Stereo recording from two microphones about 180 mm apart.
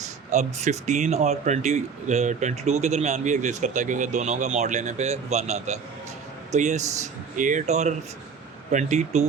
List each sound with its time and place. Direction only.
0.3 s speech: 40° right (ahead or behind)